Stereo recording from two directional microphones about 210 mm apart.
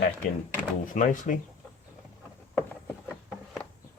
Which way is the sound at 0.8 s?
35° left (ahead or behind).